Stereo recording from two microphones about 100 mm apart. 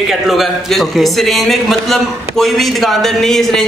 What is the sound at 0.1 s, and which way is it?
A man's voice, centre (ahead or behind).